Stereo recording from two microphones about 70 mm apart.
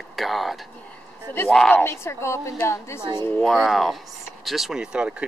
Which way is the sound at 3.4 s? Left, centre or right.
Centre.